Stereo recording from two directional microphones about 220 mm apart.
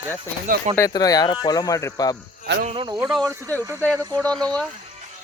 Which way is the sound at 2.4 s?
50° right (ahead or behind).